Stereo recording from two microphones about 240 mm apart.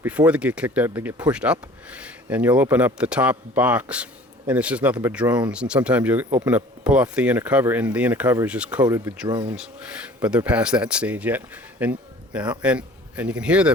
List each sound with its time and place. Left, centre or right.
0.0 s speech: centre
9.2 s speech: centre
9.6 s speech: centre